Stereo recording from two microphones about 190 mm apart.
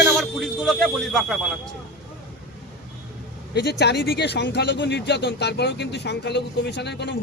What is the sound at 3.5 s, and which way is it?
Speech, 65° left (ahead or behind).